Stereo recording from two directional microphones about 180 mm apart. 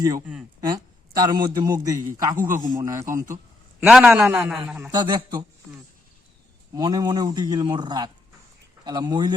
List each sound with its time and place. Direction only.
1.2 s a man's voice: 20° right (ahead or behind)
4.9 s a man's voice: 25° right (ahead or behind)
6.7 s a man's voice: 20° right (ahead or behind)